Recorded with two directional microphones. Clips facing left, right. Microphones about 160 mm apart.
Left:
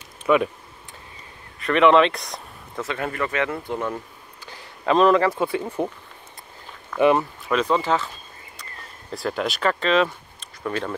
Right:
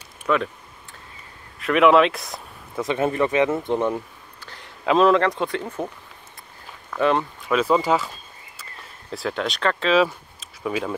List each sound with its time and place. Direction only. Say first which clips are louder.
0.3 s speech: left 3 dB; 10° left (ahead or behind)
1.6 s speech: even; 5° right (ahead or behind)
2.8 s speech: right 5 dB; 20° right (ahead or behind)
4.4 s a sound: left 1 dB; 10° left (ahead or behind)
4.6 s speech: even; centre (ahead or behind)
7.0 s speech: left 3 dB; 10° left (ahead or behind)
7.4 s speech: right 3 dB; 5° right (ahead or behind)
9.1 s speech: left 1 dB; centre (ahead or behind)